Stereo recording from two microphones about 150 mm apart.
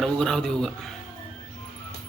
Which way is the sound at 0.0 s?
5° left (ahead or behind).